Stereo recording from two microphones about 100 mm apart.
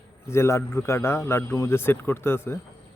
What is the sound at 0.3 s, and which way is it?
A man's voice, 30° left (ahead or behind).